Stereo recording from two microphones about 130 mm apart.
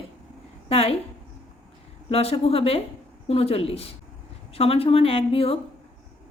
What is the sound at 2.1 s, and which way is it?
A woman's voice, 50° left (ahead or behind).